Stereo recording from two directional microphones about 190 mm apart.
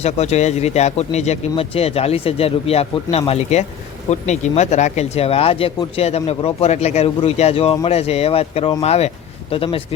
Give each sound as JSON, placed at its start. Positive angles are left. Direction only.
{"t": 0.0, "sound": "a man's voice", "side_deg": 35}